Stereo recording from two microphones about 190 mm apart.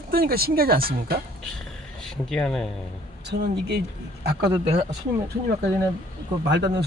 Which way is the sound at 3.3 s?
60° right (ahead or behind).